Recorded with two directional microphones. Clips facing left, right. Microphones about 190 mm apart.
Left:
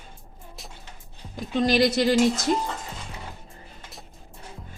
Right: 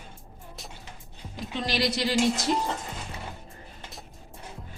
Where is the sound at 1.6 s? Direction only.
50° left (ahead or behind).